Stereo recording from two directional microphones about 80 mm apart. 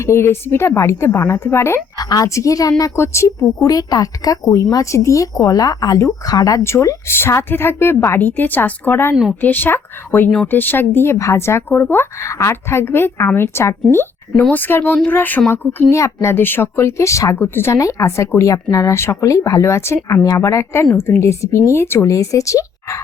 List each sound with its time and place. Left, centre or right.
0.0 s speech: left
2.0 s a woman's voice: left
2.2 s speech: left
2.9 s speech: left
6.6 s a woman's voice: left
16.0 s speech: left
17.3 s a woman's voice: left
17.7 s speech: left